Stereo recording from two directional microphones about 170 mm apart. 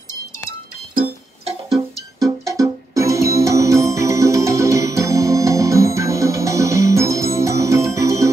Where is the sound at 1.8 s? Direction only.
20° right (ahead or behind).